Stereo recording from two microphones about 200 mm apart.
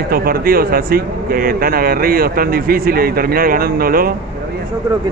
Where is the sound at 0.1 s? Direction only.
50° right (ahead or behind).